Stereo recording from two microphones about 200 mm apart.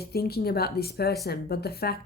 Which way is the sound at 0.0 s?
50° left (ahead or behind).